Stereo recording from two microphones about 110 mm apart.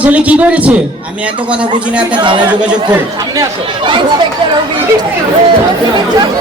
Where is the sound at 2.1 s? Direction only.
45° right (ahead or behind).